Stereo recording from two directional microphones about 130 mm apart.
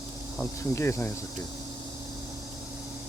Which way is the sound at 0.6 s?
20° left (ahead or behind).